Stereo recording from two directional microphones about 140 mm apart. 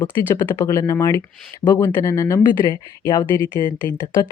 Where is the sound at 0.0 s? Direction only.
25° left (ahead or behind).